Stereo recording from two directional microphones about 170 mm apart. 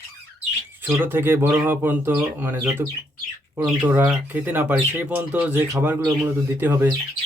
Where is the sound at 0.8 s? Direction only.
10° right (ahead or behind).